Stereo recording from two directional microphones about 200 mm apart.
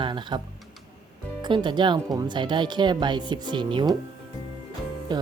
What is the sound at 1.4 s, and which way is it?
Speech, 25° right (ahead or behind).